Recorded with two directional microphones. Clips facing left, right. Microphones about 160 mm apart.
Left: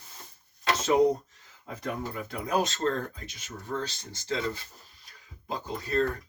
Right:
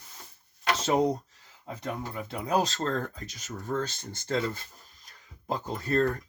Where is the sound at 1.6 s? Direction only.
25° right (ahead or behind).